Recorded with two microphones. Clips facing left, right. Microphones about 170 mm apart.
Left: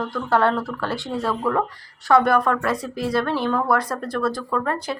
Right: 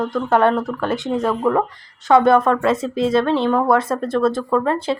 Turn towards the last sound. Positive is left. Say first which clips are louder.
# right 6 dB
turn(degrees=-25)  # may be behind; listen again after turning